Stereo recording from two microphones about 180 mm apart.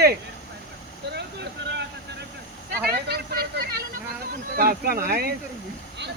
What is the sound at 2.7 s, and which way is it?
Speech, 60° right (ahead or behind).